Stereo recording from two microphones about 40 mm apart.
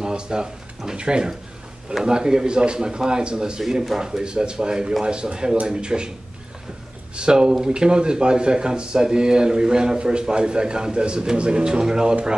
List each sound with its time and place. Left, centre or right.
0.0 s speech: centre
7.2 s speech: right